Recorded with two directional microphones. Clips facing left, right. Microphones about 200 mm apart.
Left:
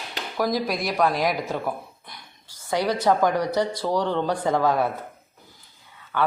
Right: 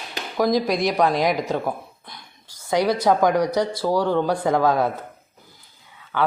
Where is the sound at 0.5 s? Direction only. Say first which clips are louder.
Right 4 dB; 5° left (ahead or behind).